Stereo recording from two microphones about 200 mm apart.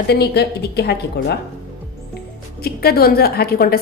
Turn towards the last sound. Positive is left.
turn(degrees=50)  # may be behind; listen again after turning